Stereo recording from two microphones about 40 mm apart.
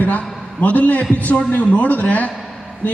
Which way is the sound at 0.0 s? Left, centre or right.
Left.